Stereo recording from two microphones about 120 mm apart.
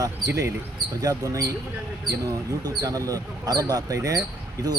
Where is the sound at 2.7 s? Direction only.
30° right (ahead or behind).